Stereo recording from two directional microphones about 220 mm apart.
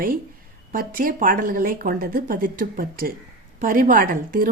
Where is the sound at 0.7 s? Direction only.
40° right (ahead or behind).